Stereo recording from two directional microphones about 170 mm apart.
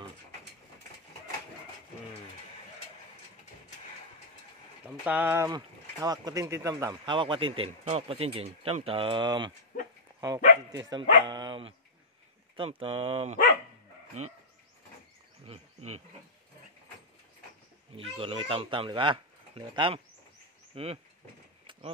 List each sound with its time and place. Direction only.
4.8 s speech: 10° right (ahead or behind); by 14.3 s 45° right (ahead or behind)
15.4 s speech: 40° right (ahead or behind)
17.9 s speech: 35° right (ahead or behind)
20.7 s a sound: 35° right (ahead or behind)